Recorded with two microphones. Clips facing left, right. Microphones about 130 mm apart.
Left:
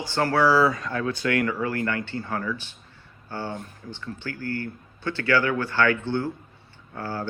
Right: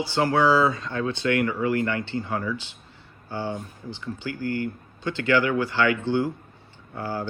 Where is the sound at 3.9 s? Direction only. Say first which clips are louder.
Right 2 dB; 15° right (ahead or behind).